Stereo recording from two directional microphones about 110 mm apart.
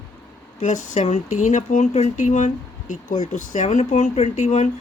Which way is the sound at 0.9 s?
90° left.